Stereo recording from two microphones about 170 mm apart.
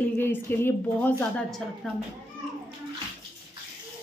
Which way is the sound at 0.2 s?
10° left (ahead or behind).